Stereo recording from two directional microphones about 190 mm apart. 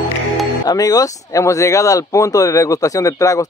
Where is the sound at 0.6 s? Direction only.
20° left (ahead or behind).